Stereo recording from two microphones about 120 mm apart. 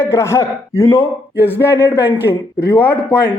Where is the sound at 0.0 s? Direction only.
20° left (ahead or behind).